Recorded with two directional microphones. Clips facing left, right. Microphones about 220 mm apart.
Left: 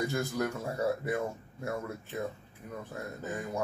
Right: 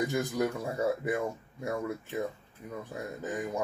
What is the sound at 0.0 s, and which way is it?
Speech, 15° right (ahead or behind).